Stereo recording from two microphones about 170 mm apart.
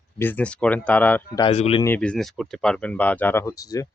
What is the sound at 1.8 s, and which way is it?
Speech, 10° left (ahead or behind).